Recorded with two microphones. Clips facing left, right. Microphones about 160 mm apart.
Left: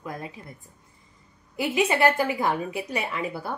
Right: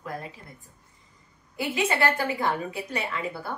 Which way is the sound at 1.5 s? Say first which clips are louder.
Left 3 dB; 20° left (ahead or behind).